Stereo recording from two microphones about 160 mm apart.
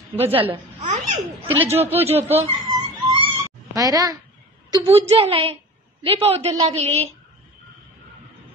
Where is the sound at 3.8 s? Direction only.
20° right (ahead or behind).